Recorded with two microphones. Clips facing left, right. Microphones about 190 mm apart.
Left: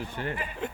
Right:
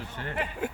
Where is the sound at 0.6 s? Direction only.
5° right (ahead or behind).